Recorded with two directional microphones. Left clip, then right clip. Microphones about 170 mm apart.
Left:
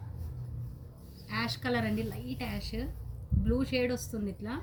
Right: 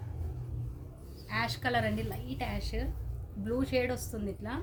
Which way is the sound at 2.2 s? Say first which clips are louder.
Right 1 dB; 20° right (ahead or behind).